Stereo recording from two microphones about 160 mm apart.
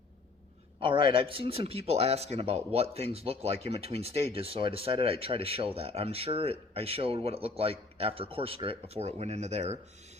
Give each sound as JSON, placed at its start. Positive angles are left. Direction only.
{"t": 0.8, "sound": "speech", "side_deg": -30}